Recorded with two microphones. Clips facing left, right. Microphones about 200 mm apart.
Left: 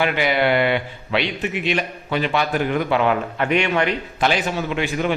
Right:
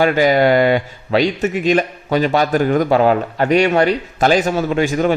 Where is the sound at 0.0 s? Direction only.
40° right (ahead or behind).